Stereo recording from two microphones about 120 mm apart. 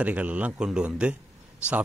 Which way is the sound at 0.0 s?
10° right (ahead or behind).